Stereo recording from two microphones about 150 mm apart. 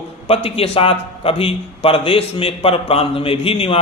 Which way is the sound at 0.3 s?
40° left (ahead or behind).